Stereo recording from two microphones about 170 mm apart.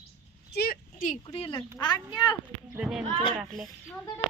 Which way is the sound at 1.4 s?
35° left (ahead or behind).